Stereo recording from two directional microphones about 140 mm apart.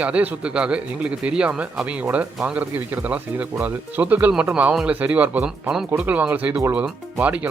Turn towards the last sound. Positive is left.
turn(degrees=-10)  # may be behind; listen again after turning